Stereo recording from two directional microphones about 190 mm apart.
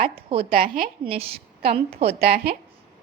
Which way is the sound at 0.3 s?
30° right (ahead or behind).